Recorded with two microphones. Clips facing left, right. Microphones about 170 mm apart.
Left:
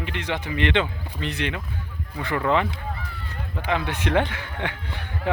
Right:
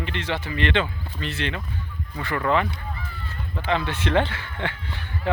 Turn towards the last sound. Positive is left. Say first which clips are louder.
# even
turn(degrees=15)  # may be behind; listen again after turning